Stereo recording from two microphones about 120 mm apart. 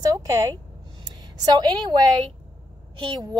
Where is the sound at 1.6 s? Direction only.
35° right (ahead or behind).